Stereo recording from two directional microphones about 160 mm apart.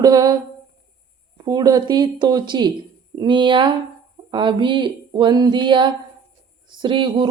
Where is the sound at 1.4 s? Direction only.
25° right (ahead or behind).